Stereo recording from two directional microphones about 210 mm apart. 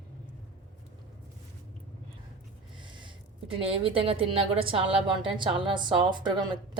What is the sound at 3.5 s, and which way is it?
A woman's voice, 25° right (ahead or behind).